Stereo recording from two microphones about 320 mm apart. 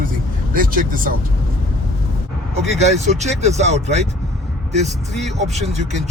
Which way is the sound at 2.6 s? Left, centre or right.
Right.